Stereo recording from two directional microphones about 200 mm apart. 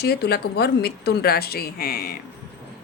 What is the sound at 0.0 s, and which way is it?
A woman's voice, 55° left (ahead or behind).